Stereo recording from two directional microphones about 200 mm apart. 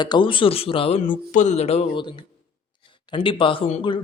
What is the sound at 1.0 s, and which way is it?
Speech, 40° left (ahead or behind).